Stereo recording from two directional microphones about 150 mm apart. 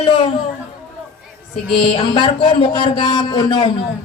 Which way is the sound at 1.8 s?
35° left (ahead or behind).